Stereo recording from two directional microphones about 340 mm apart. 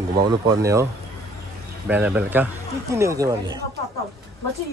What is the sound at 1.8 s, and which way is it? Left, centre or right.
Speech, centre.